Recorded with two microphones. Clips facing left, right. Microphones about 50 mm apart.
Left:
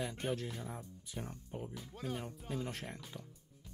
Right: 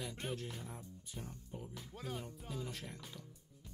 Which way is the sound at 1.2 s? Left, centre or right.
Left.